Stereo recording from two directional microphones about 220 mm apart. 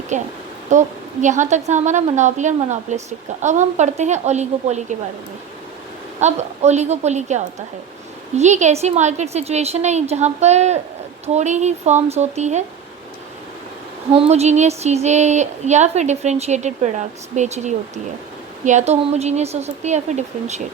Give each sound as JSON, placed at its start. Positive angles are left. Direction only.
{"t": 0.1, "sound": "a woman's voice", "side_deg": -35}
{"t": 6.1, "sound": "a woman's voice", "side_deg": -30}
{"t": 14.3, "sound": "a woman's voice", "side_deg": -30}